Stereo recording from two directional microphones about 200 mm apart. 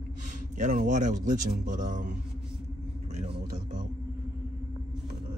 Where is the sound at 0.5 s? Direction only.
40° right (ahead or behind).